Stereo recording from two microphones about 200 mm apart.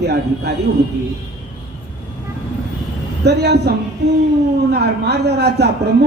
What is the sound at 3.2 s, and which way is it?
Speech, 55° right (ahead or behind).